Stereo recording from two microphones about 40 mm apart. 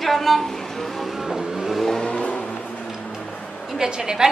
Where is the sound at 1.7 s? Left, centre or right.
Centre.